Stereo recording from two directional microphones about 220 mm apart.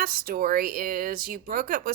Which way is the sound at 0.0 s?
40° right (ahead or behind).